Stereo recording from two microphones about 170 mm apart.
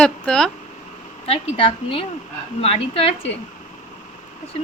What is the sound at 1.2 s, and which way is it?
A woman's voice, 35° left (ahead or behind).